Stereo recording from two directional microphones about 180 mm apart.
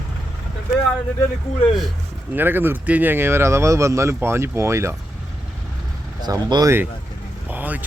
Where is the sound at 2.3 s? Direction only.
10° right (ahead or behind).